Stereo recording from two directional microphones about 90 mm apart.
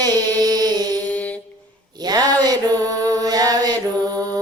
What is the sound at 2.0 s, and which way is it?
Mantra, 50° right (ahead or behind).